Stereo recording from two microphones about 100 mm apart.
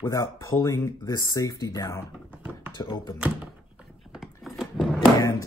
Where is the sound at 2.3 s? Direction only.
15° right (ahead or behind).